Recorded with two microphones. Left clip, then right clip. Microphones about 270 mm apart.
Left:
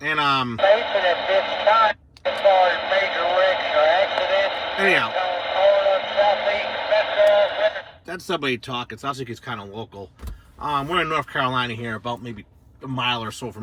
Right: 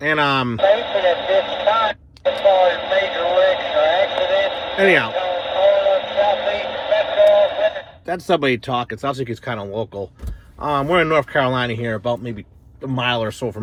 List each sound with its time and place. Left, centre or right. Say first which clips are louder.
0.0 s speech: right 3 dB; centre
0.5 s radio: right 2 dB; left
4.8 s a man's voice: right 4 dB; centre
5.0 s radio: right 2 dB; centre
8.0 s speech: right 8 dB; centre
10.7 s speech: right 5 dB; centre